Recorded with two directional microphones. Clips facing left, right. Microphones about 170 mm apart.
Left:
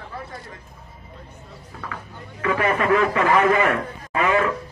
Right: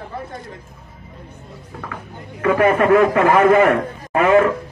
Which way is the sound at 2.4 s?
50° right (ahead or behind).